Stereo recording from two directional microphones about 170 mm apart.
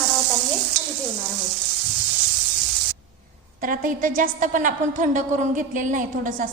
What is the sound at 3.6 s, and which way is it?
A woman's voice, 55° right (ahead or behind).